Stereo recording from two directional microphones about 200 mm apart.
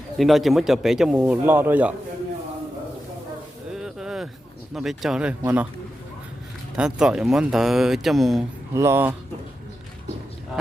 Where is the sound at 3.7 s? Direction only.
5° right (ahead or behind).